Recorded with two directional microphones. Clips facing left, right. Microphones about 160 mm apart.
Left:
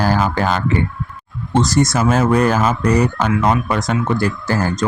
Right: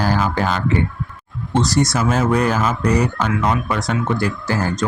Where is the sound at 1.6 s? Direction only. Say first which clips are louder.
Left 2 dB; 50° left (ahead or behind).